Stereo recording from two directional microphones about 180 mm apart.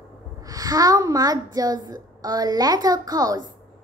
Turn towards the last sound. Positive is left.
turn(degrees=-20)  # may be behind; listen again after turning